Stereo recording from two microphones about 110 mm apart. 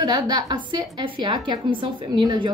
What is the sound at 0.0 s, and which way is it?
A woman's voice, 40° right (ahead or behind).